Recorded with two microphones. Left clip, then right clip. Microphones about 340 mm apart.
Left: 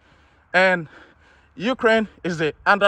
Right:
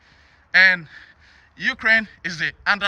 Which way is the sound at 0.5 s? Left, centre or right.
Centre.